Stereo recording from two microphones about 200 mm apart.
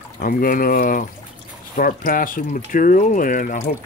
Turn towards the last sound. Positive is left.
turn(degrees=40)  # may be behind; listen again after turning